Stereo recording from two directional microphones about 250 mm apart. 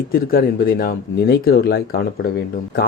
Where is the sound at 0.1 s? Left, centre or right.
Left.